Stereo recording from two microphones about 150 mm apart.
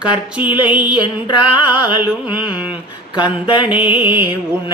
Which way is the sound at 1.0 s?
30° left (ahead or behind).